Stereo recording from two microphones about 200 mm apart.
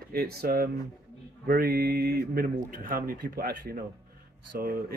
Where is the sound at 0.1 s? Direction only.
50° right (ahead or behind).